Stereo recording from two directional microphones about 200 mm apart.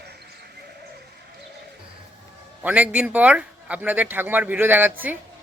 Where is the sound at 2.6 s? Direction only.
5° right (ahead or behind).